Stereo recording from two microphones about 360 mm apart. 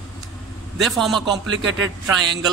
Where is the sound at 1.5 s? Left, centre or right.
Right.